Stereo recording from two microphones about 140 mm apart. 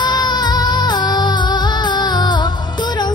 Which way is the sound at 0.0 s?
30° left (ahead or behind).